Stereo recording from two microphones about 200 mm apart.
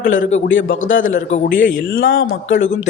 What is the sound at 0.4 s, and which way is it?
Speech, 75° left (ahead or behind).